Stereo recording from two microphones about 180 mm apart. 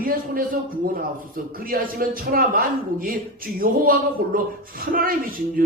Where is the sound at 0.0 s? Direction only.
50° right (ahead or behind).